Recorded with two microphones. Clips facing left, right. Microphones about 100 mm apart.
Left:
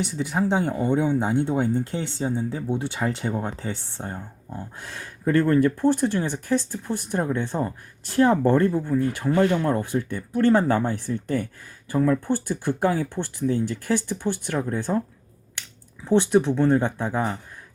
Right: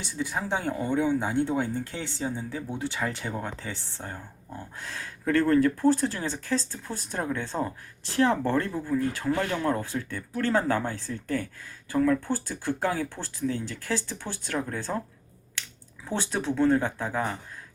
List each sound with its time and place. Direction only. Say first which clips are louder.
0.2 s speech: left 5 dB; 20° left (ahead or behind)
12.2 s speech: left 5 dB; 20° left (ahead or behind)
16.3 s speech: even; 20° left (ahead or behind)